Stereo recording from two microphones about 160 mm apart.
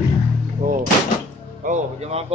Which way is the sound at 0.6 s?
55° right (ahead or behind).